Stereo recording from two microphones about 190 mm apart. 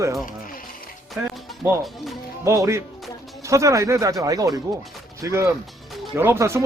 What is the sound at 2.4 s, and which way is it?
Speech, 15° right (ahead or behind).